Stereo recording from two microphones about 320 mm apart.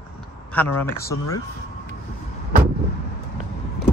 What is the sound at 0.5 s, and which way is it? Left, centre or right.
Speech, centre.